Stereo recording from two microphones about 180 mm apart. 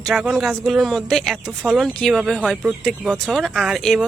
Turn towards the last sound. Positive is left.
turn(degrees=0)  # may be behind; listen again after turning